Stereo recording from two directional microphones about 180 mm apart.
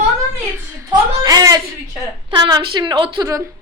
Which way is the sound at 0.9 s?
20° right (ahead or behind).